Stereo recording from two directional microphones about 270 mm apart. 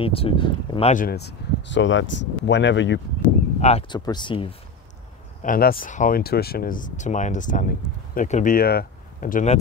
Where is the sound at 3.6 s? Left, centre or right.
Centre.